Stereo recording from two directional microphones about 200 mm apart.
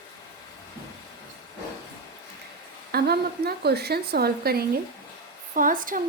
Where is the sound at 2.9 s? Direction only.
50° right (ahead or behind).